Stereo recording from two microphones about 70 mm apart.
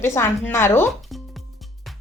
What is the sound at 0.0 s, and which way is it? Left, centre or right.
Speech, left.